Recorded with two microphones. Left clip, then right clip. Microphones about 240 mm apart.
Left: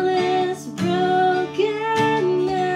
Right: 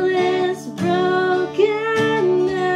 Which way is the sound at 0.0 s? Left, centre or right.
Centre.